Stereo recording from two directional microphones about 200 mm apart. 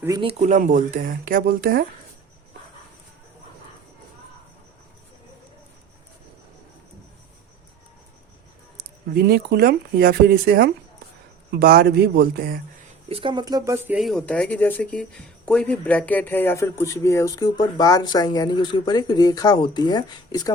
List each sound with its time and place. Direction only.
0.2 s speech: 35° right (ahead or behind)
8.8 s speech: 55° right (ahead or behind)
13.1 s speech: 25° right (ahead or behind); by 20.5 s 20° left (ahead or behind)